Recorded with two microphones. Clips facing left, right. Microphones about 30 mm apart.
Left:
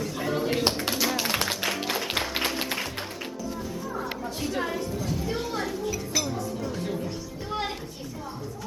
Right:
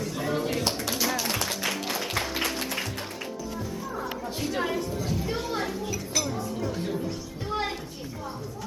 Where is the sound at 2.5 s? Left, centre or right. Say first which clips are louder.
Left 2 dB; centre.